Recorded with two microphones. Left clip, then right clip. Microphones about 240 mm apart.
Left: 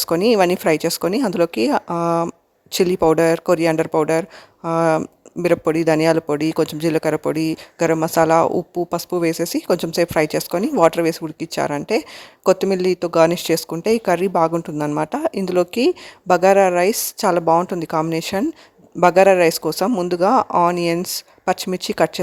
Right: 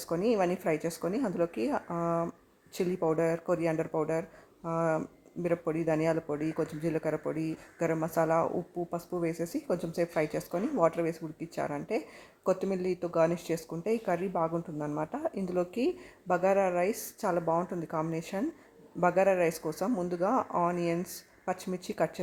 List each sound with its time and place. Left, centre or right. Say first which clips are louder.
0.0 s a man's voice: left 13 dB; left